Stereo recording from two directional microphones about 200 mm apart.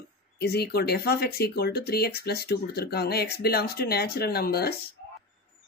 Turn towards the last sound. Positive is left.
turn(degrees=50)  # may be behind; listen again after turning